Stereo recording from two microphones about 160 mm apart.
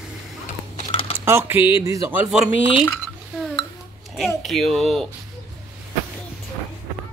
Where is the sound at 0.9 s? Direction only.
35° left (ahead or behind).